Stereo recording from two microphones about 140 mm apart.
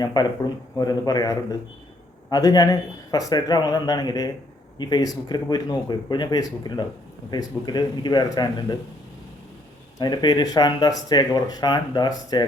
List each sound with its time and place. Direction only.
0.0 s speech: 30° left (ahead or behind)
10.0 s speech: 30° left (ahead or behind)